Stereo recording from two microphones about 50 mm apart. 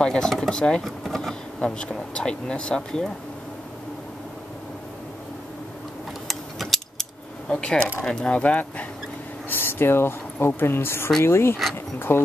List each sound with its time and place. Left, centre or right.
0.0 s speech: centre
0.8 s speech: centre
1.6 s speech: left
6.2 s gears: centre
7.4 s speech: left
8.4 s speech: left
9.5 s speech: left